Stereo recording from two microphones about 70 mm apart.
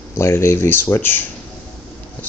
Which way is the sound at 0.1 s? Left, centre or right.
Left.